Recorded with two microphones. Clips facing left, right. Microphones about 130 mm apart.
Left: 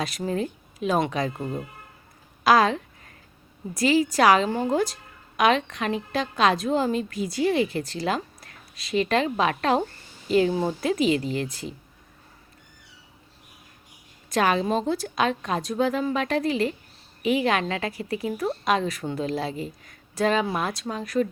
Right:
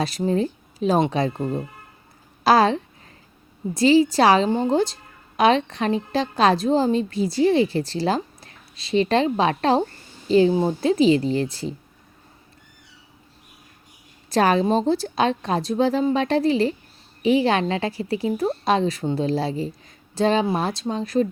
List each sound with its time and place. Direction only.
0.0 s a woman's voice: 30° right (ahead or behind)
14.3 s a woman's voice: 35° right (ahead or behind)